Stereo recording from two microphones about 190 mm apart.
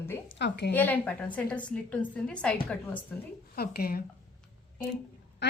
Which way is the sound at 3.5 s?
55° left (ahead or behind).